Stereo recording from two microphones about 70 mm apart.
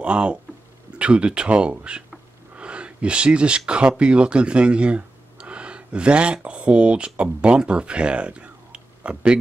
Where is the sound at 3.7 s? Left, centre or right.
Centre.